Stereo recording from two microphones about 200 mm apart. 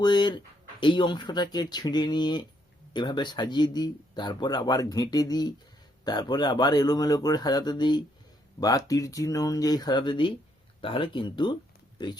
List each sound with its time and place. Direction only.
0.0 s speech: 20° left (ahead or behind)